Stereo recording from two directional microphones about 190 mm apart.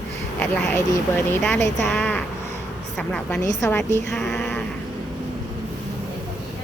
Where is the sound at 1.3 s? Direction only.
10° left (ahead or behind).